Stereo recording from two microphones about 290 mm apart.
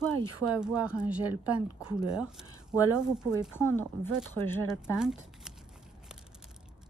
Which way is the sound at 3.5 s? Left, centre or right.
Centre.